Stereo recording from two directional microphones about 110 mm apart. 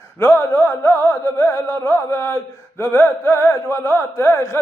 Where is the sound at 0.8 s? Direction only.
25° left (ahead or behind).